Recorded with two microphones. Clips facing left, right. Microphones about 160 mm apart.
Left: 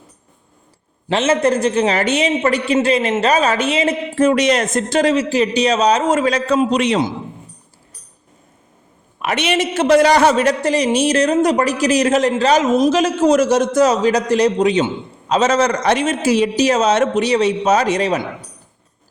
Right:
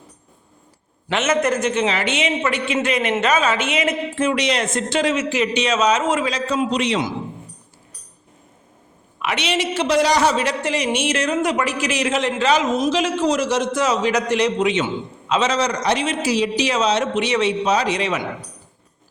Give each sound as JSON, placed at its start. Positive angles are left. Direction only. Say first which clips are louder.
{"t": 1.0, "sound": "a man's voice", "louder": "left 4 dB", "side_deg": 30}
{"t": 9.1, "sound": "a man's voice", "louder": "left 4 dB", "side_deg": 45}